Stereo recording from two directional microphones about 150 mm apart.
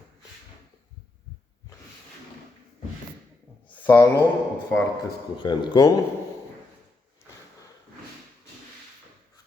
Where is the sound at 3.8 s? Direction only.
15° left (ahead or behind).